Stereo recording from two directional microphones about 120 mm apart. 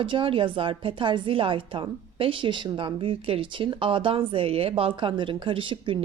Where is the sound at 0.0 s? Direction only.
45° right (ahead or behind).